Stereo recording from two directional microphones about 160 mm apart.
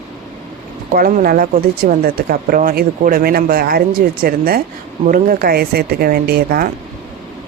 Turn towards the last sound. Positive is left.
turn(degrees=-65)  # may be behind; listen again after turning